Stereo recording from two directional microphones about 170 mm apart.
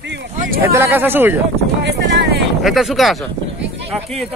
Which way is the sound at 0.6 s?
15° right (ahead or behind).